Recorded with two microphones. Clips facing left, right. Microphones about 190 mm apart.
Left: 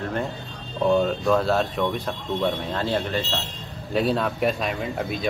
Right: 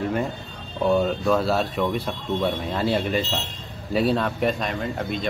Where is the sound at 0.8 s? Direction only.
Centre (ahead or behind).